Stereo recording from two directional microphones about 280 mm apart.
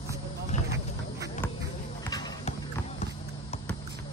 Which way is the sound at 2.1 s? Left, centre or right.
Centre.